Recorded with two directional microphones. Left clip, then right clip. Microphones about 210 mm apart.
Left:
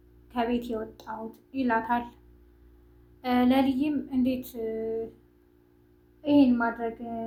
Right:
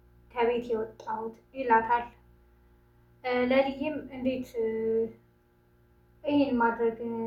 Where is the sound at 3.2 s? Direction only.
45° left (ahead or behind).